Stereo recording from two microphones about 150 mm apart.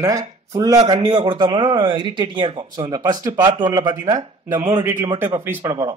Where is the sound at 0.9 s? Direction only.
35° right (ahead or behind).